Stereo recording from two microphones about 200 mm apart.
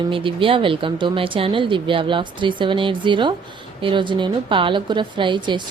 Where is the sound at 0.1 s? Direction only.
25° right (ahead or behind).